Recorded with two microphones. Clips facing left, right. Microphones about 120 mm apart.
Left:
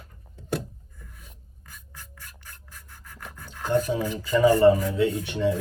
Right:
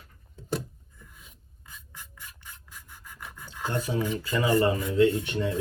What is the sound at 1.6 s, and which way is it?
Filing, 15° right (ahead or behind).